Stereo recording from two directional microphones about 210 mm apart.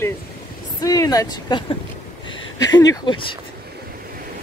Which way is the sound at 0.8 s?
15° left (ahead or behind).